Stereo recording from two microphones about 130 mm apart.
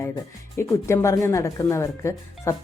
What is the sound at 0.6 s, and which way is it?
Speech, 20° left (ahead or behind).